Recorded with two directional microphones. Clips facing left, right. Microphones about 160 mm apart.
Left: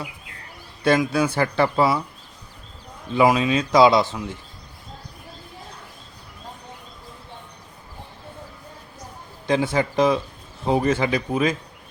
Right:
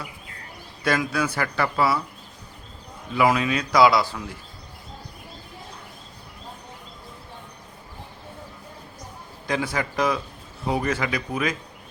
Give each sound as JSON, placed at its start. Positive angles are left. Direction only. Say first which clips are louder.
{"t": 0.9, "sound": "speech", "louder": "left 5 dB", "side_deg": 25}
{"t": 3.2, "sound": "speech", "louder": "left 3 dB", "side_deg": 25}
{"t": 9.5, "sound": "speech", "louder": "left 5 dB", "side_deg": 25}